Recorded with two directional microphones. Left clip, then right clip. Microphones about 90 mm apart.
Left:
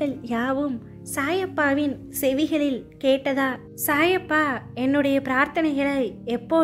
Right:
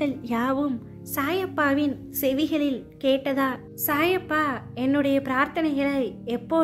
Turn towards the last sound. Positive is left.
turn(degrees=35)  # may be behind; listen again after turning